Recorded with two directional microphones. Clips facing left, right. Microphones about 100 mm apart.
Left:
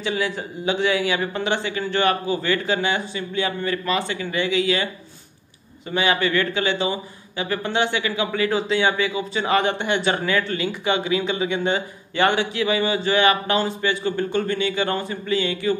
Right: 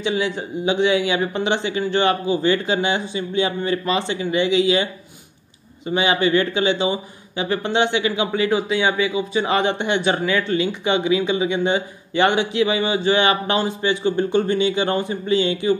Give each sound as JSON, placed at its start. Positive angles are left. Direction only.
{"t": 0.0, "sound": "speech", "side_deg": -20}
{"t": 5.9, "sound": "speech", "side_deg": -20}